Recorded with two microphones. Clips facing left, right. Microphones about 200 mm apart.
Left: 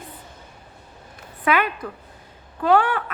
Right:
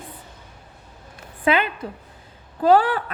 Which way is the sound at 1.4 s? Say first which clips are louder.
Right 1 dB; 25° right (ahead or behind).